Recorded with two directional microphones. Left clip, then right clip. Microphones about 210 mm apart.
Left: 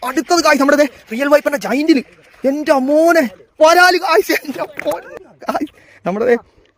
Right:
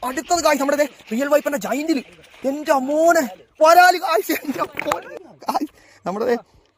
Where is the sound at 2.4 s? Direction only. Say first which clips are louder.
Left 5 dB; 40° left (ahead or behind).